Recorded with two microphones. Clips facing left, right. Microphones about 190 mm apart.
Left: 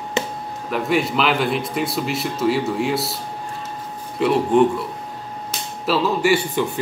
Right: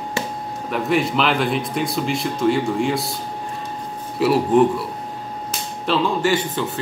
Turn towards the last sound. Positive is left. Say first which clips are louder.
# left 2 dB
turn(degrees=10)  # may be behind; listen again after turning